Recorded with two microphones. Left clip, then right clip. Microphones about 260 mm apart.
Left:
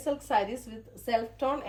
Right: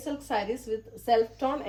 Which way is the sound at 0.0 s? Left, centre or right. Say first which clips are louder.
Left 3 dB; centre.